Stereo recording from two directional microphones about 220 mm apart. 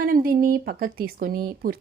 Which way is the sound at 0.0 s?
40° right (ahead or behind).